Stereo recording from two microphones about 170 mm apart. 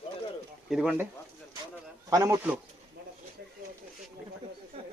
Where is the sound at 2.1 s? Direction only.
15° right (ahead or behind).